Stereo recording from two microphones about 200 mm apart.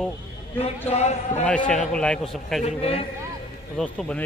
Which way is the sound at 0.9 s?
35° left (ahead or behind).